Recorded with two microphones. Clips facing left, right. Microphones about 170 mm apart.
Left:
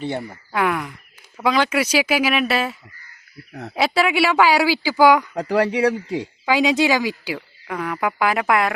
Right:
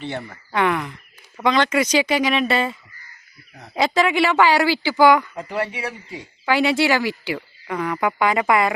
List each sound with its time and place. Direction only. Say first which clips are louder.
0.1 s a woman's voice: left 3 dB; 15° left (ahead or behind)
0.5 s speech: right 1 dB; 5° left (ahead or behind)
3.8 s a woman's voice: even; 5° left (ahead or behind)
5.3 s speech: left 7 dB; 75° left (ahead or behind)
6.4 s a woman's voice: even; 15° left (ahead or behind)
7.3 s speech: right 2 dB; centre (ahead or behind)